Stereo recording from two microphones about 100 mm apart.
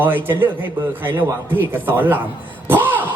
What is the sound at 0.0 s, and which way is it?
Speech, 20° right (ahead or behind).